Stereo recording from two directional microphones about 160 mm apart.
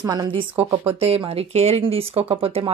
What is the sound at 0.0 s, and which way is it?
A woman's voice, 20° right (ahead or behind).